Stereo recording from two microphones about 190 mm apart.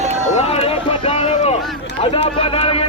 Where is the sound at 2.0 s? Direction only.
30° left (ahead or behind).